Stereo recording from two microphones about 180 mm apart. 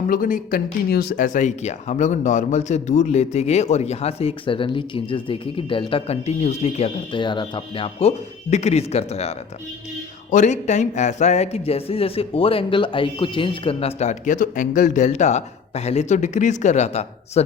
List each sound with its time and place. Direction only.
0.1 s a man's voice: 50° left (ahead or behind)
10.3 s a man's voice: 40° left (ahead or behind)